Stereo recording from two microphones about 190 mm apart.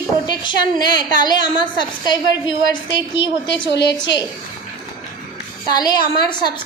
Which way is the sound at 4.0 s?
20° left (ahead or behind).